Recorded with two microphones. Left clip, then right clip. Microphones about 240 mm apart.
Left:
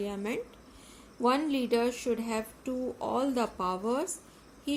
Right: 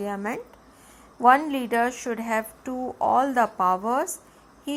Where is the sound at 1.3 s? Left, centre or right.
Centre.